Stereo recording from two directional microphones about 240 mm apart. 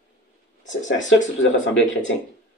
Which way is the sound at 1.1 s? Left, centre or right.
Left.